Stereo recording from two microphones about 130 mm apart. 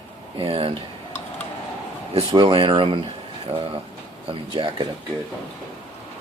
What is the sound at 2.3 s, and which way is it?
Speech, 40° right (ahead or behind).